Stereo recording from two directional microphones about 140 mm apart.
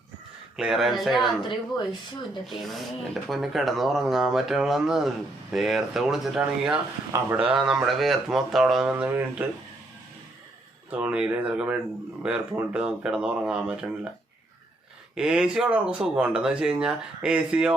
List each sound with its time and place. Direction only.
0.5 s speech: centre (ahead or behind)
1.5 s speech: 35° left (ahead or behind)
2.5 s speech: centre (ahead or behind)
10.9 s speech: 10° right (ahead or behind)
15.1 s speech: 5° right (ahead or behind)